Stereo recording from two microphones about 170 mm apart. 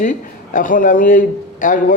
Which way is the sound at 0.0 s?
50° left (ahead or behind).